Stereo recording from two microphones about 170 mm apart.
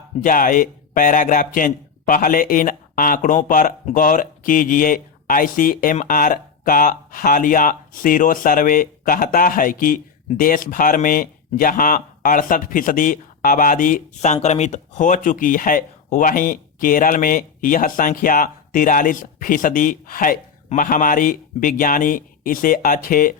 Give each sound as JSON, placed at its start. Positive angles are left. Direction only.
{"t": 0.2, "sound": "speech", "side_deg": 50}